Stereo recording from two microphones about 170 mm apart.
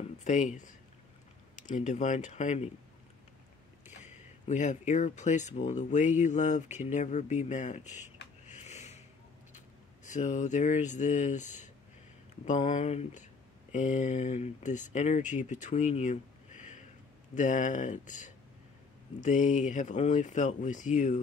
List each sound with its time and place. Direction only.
0.2 s speech: 45° left (ahead or behind)
3.8 s speech: 45° left (ahead or behind)
10.0 s speech: 45° left (ahead or behind)